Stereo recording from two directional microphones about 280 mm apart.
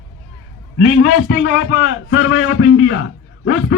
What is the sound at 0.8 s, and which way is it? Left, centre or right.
A man's voice, left.